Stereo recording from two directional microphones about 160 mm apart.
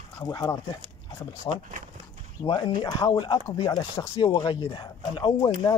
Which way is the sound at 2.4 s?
25° left (ahead or behind).